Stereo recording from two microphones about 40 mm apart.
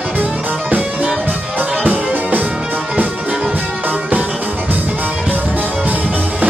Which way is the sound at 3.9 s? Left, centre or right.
Right.